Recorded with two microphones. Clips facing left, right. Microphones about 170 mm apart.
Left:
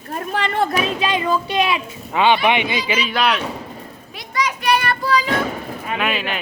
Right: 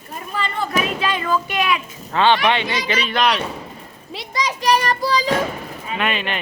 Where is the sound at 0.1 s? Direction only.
70° left (ahead or behind).